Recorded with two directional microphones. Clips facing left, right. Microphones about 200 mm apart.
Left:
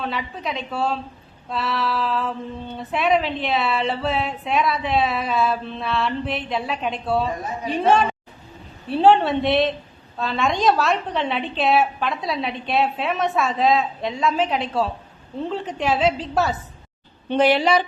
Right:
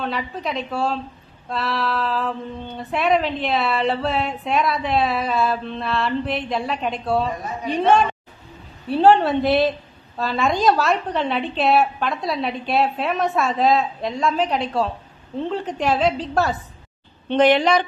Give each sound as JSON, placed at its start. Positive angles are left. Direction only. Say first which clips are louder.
{"t": 0.0, "sound": "a woman's voice", "louder": "right 2 dB", "side_deg": 0}